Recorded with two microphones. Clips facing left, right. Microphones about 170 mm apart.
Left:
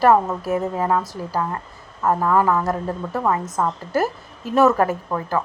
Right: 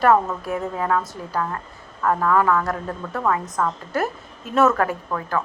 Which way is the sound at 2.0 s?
20° left (ahead or behind).